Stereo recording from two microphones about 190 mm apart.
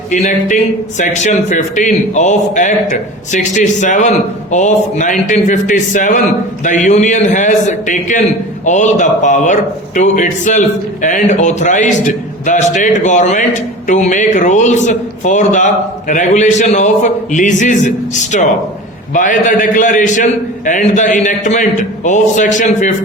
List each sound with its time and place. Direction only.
0.1 s a man's voice: 40° left (ahead or behind)